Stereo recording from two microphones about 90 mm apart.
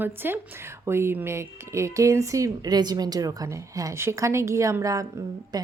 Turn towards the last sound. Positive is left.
turn(degrees=-45)  # may be behind; listen again after turning